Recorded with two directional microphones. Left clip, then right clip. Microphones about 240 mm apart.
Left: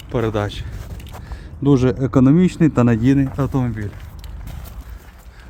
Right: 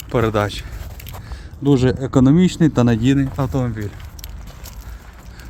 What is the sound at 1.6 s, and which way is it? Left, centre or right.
Speech, centre.